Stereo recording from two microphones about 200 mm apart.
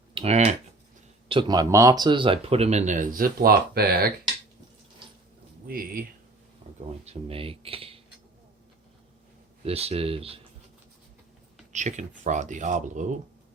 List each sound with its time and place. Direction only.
0.1 s a sound: 30° right (ahead or behind)
1.3 s speech: 25° right (ahead or behind); by 4.1 s 50° right (ahead or behind)
5.6 s speech: 45° right (ahead or behind)
7.0 s speech: 30° right (ahead or behind)
9.6 s speech: 30° right (ahead or behind)
11.7 s speech: 35° right (ahead or behind)